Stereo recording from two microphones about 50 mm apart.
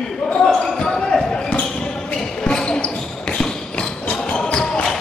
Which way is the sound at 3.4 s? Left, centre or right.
Centre.